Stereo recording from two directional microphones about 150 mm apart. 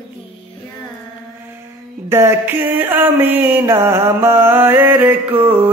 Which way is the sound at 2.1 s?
15° right (ahead or behind).